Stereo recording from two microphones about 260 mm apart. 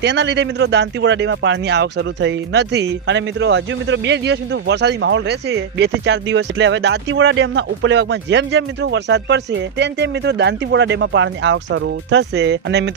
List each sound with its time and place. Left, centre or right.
0.0 s a man's voice: right